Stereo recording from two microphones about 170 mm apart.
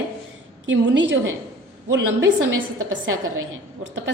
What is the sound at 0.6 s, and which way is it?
Speech, 90° right.